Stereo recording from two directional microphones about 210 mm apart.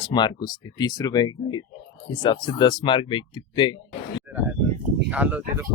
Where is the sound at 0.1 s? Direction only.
20° left (ahead or behind).